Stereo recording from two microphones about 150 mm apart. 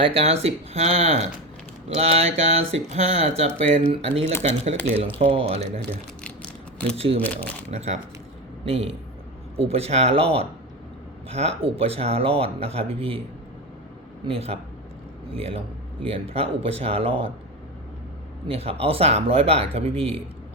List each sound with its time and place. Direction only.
0.0 s speech: 45° right (ahead or behind)
6.9 s speech: 40° right (ahead or behind)
7.2 s speech: 10° left (ahead or behind)
7.7 s speech: 45° right (ahead or behind)
14.3 s speech: 40° right (ahead or behind)
18.4 s speech: 40° right (ahead or behind)